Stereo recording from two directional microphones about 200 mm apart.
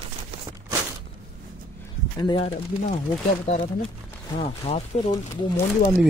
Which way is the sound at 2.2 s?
25° left (ahead or behind).